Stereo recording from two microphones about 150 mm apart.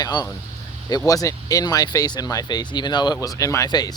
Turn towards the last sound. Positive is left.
turn(degrees=25)  # may be behind; listen again after turning